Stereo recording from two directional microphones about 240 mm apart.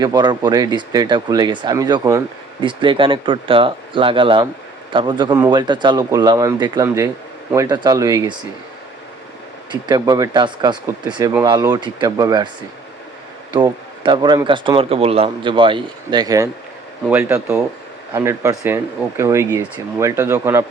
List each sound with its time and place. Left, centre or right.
0.0 s speech: centre
9.8 s speech: centre
13.6 s speech: centre